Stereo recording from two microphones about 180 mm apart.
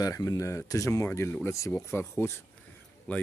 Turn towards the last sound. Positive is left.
turn(degrees=5)  # may be behind; listen again after turning